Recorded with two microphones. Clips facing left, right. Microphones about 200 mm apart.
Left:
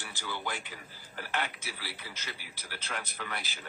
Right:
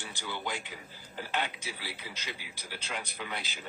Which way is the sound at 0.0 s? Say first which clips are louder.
Even; 15° right (ahead or behind).